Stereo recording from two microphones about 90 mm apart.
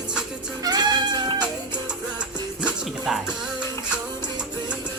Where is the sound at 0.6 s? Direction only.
50° right (ahead or behind).